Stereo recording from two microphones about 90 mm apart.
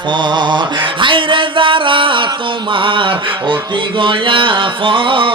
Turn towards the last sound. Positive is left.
turn(degrees=-70)  # may be behind; listen again after turning